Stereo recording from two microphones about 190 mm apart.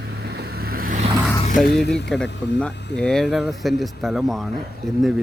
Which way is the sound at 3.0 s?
5° left (ahead or behind).